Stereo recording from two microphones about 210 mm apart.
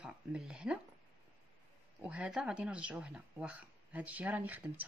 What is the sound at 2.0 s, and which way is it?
Speech, 5° right (ahead or behind).